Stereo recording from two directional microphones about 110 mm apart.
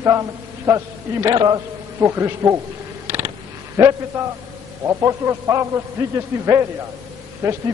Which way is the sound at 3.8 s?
30° right (ahead or behind).